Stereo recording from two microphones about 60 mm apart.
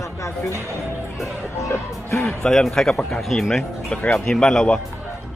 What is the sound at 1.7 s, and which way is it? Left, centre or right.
Speech, left.